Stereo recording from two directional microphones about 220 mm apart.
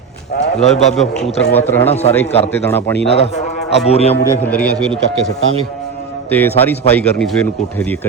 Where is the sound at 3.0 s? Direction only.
30° left (ahead or behind).